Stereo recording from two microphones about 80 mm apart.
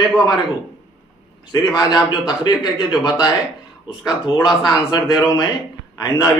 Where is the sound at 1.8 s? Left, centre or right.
Left.